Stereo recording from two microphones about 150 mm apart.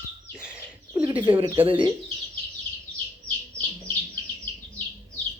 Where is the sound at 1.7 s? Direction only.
35° right (ahead or behind).